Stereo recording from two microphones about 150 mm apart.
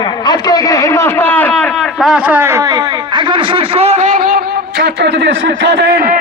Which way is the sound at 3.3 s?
35° right (ahead or behind).